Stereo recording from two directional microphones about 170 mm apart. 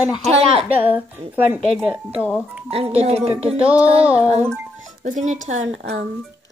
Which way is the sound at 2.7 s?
35° right (ahead or behind).